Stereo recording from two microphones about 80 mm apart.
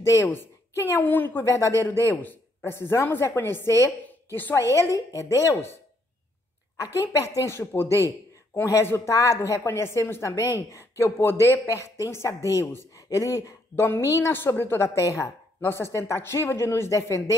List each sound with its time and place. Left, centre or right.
0.0 s a woman's voice: left
1.0 s speech: left
1.4 s a woman's voice: left
7.1 s a woman's voice: left
13.7 s a woman's voice: left